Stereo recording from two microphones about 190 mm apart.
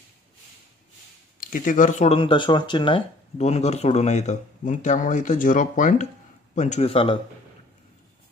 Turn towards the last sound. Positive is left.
turn(degrees=30)  # may be behind; listen again after turning